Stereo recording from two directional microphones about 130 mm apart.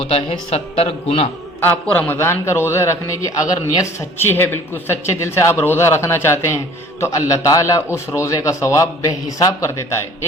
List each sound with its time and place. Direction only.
0.0 s speech: 50° left (ahead or behind)
1.6 s speech: 10° left (ahead or behind)